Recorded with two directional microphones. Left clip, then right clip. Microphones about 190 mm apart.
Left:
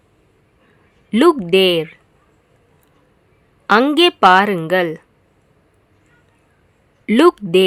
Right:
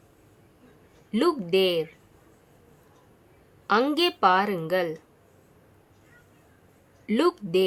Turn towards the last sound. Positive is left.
turn(degrees=40)  # may be behind; listen again after turning